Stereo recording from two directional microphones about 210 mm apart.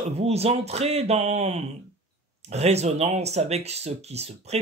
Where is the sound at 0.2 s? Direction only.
30° right (ahead or behind).